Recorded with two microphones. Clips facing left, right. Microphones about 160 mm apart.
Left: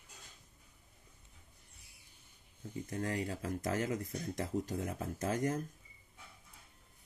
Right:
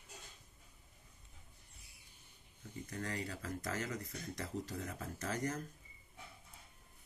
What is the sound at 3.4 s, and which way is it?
Speech, 50° left (ahead or behind).